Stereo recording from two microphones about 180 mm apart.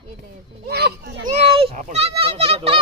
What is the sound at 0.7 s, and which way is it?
Speech, 65° right (ahead or behind).